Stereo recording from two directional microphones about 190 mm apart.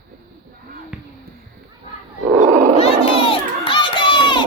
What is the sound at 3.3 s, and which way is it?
Crowd, 25° left (ahead or behind).